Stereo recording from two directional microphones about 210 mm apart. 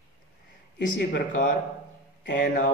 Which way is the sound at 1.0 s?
55° left (ahead or behind).